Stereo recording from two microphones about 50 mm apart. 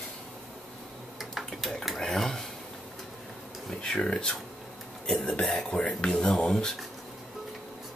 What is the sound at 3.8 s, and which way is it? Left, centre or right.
Speech, centre.